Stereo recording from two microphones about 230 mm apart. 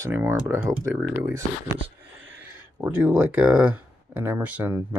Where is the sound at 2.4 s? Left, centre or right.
Centre.